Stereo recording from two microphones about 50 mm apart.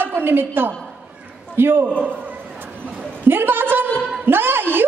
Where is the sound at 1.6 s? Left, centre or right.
Right.